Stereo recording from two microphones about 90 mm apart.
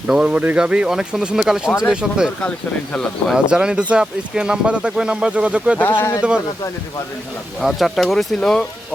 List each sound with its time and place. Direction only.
0.1 s speech: 10° right (ahead or behind)
3.3 s speech: 10° right (ahead or behind)
6.0 s speech: 35° left (ahead or behind)
7.6 s speech: centre (ahead or behind)